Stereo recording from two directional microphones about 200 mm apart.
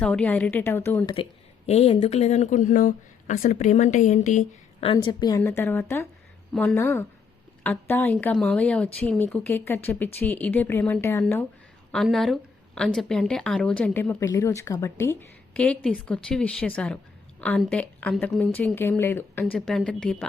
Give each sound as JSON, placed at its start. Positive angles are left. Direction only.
{"t": 0.0, "sound": "a woman's voice", "side_deg": 5}
{"t": 1.1, "sound": "speech", "side_deg": 30}
{"t": 5.4, "sound": "a woman's voice", "side_deg": 10}
{"t": 6.7, "sound": "a woman's voice", "side_deg": 15}